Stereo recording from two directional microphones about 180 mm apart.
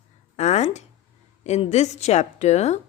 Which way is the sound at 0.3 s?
40° left (ahead or behind).